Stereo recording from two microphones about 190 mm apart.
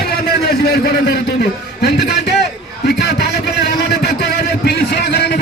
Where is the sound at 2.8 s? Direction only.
60° left (ahead or behind).